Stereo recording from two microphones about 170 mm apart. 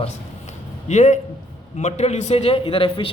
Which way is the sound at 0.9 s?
45° left (ahead or behind).